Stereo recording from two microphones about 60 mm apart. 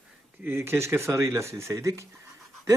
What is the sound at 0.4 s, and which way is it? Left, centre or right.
Speech, right.